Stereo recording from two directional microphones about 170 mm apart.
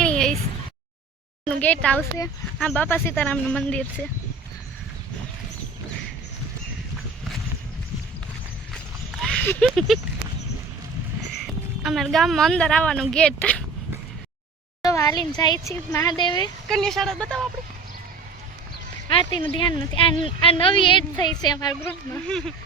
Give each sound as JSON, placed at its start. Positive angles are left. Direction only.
{"t": 0.0, "sound": "a sound", "side_deg": 5}
{"t": 1.6, "sound": "speech", "side_deg": 10}
{"t": 9.2, "sound": "speech", "side_deg": 5}
{"t": 11.8, "sound": "speech", "side_deg": 0}
{"t": 14.8, "sound": "a sound", "side_deg": 20}
{"t": 15.3, "sound": "speech", "side_deg": 25}
{"t": 16.1, "sound": "speech", "side_deg": 25}
{"t": 16.6, "sound": "speech", "side_deg": 0}
{"t": 19.0, "sound": "speech", "side_deg": 25}
{"t": 21.8, "sound": "speech", "side_deg": 5}